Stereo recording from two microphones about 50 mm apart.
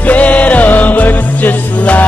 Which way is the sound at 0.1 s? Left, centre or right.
Left.